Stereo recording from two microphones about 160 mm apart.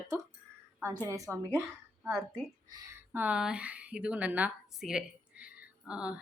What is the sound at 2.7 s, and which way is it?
Speech, 20° right (ahead or behind).